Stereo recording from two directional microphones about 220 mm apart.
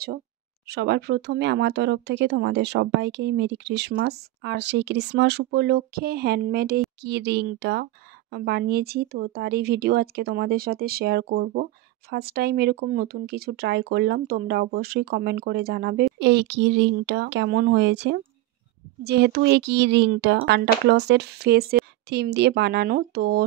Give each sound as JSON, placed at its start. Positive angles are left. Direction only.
{"t": 0.7, "sound": "speech", "side_deg": -50}